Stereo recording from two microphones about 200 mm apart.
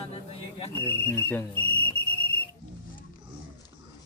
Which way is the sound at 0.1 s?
30° left (ahead or behind).